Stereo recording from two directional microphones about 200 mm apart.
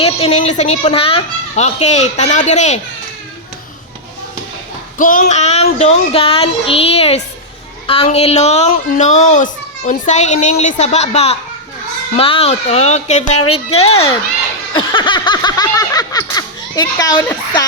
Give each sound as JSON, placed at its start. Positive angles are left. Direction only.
{"t": 0.0, "sound": "speech", "side_deg": 30}
{"t": 4.9, "sound": "speech", "side_deg": 45}
{"t": 14.7, "sound": "a sound", "side_deg": 25}